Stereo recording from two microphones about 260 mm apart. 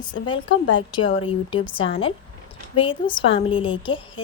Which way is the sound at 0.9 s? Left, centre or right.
Centre.